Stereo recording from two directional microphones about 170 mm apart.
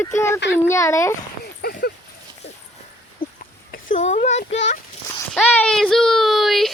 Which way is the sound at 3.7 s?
50° left (ahead or behind).